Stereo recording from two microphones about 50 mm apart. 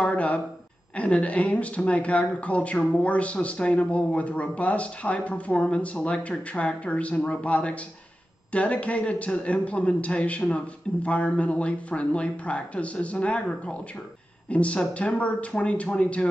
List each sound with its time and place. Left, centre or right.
0.0 s speech: left